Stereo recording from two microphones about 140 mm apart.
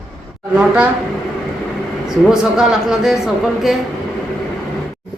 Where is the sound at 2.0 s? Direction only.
5° right (ahead or behind).